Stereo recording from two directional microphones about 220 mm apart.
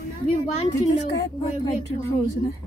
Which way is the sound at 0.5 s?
30° left (ahead or behind).